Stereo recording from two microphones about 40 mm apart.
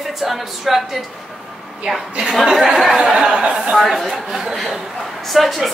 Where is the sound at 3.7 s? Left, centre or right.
Centre.